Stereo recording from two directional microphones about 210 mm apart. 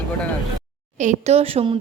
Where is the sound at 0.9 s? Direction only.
35° right (ahead or behind).